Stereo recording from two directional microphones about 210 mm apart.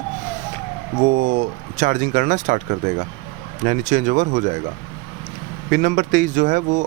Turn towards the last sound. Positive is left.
turn(degrees=-40)  # may be behind; listen again after turning